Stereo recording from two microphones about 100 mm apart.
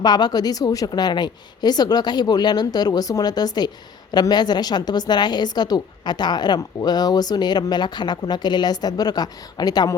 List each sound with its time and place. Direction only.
0.0 s a woman's voice: 45° left (ahead or behind)